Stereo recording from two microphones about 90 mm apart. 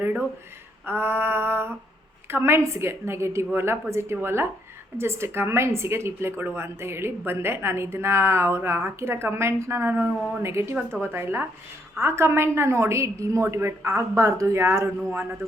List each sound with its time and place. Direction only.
0.9 s a woman's voice: 25° right (ahead or behind)